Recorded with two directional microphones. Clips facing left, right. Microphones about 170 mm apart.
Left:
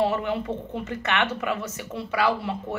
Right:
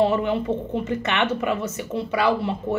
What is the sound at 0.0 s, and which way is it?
Speech, 25° right (ahead or behind).